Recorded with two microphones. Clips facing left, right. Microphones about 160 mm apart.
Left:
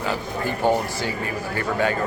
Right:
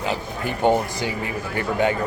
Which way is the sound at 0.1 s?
20° right (ahead or behind).